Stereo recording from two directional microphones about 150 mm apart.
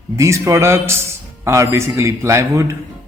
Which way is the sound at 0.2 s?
20° right (ahead or behind).